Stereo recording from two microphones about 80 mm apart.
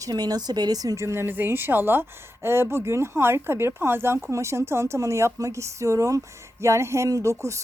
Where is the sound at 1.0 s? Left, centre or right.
Right.